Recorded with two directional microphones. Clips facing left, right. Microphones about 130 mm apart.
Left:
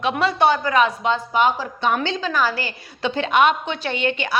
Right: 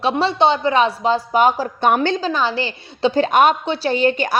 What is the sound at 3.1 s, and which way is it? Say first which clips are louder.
A woman's voice: right 2 dB; 40° right (ahead or behind).